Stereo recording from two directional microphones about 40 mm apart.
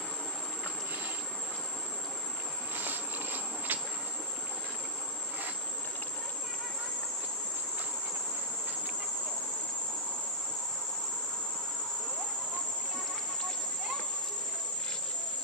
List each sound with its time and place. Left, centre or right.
2.7 s insect: right